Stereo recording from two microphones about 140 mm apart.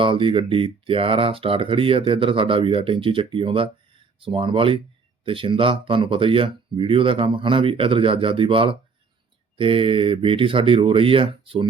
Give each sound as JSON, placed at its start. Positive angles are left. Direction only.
{"t": 0.0, "sound": "speech", "side_deg": -35}